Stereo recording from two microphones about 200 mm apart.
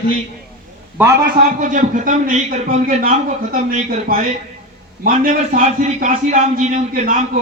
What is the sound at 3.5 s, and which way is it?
A man's voice, 35° right (ahead or behind).